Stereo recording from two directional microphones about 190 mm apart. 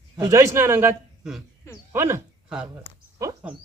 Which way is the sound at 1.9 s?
15° right (ahead or behind).